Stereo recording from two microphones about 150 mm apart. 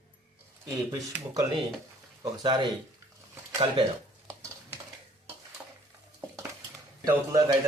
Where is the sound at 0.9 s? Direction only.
20° right (ahead or behind).